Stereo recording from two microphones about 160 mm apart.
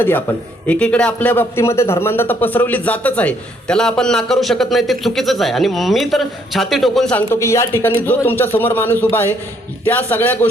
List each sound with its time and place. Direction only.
0.0 s a man's voice: 10° left (ahead or behind)